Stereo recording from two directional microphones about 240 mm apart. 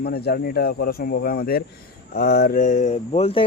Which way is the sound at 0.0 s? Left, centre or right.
Left.